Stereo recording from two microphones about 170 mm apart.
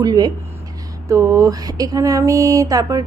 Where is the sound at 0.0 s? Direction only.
20° right (ahead or behind).